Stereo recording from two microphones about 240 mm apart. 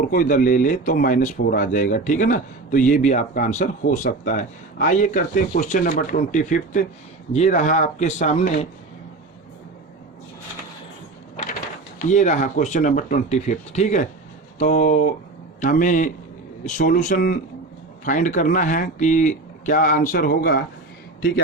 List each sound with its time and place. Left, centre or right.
0.1 s speech: left
12.0 s a man's voice: left